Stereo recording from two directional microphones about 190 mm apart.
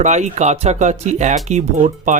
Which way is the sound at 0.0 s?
40° right (ahead or behind).